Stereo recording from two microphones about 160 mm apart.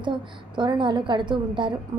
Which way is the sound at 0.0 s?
30° right (ahead or behind).